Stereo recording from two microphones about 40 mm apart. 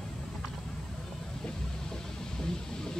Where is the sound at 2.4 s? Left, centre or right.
Centre.